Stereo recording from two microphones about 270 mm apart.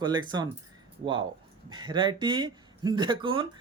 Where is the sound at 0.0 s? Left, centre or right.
Centre.